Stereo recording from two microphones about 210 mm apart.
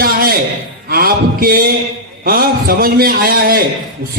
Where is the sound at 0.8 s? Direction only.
45° right (ahead or behind).